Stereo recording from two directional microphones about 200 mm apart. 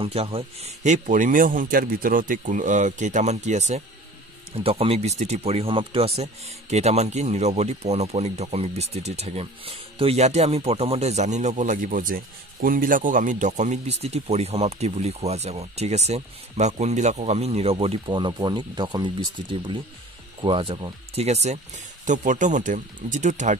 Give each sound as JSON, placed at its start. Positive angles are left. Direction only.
{"t": 0.0, "sound": "speech", "side_deg": -30}
{"t": 20.4, "sound": "speech", "side_deg": -25}